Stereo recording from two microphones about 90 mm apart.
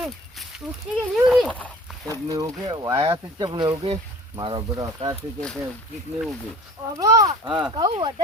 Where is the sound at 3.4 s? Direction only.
55° right (ahead or behind).